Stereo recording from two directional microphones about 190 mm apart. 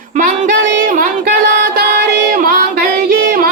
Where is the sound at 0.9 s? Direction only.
50° right (ahead or behind).